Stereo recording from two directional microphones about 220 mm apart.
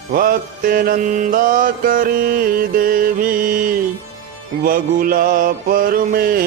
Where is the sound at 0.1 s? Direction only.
40° right (ahead or behind).